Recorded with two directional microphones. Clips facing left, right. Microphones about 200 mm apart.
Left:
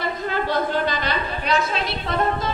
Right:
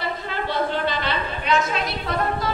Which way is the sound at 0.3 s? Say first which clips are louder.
Left 2 dB; 45° left (ahead or behind).